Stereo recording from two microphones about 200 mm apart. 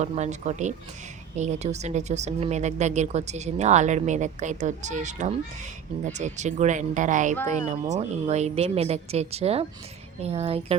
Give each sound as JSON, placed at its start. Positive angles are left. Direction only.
{"t": 0.0, "sound": "speech", "side_deg": -35}